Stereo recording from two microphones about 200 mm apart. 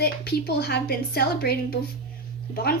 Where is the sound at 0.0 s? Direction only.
50° left (ahead or behind).